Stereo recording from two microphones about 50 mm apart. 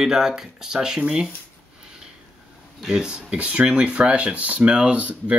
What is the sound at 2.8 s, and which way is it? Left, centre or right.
Speech, centre.